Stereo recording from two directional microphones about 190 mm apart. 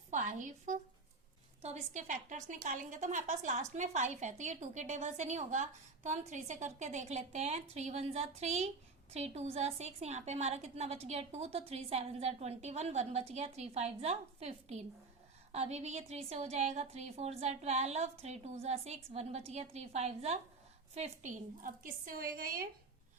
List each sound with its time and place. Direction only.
0.1 s a woman's voice: 40° right (ahead or behind)